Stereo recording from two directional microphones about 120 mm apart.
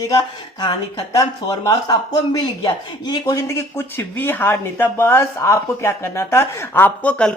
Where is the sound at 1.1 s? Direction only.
30° left (ahead or behind).